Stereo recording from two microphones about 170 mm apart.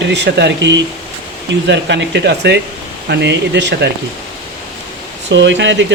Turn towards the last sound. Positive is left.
turn(degrees=-90)